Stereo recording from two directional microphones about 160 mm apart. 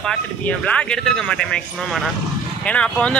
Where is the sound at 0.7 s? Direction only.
5° left (ahead or behind).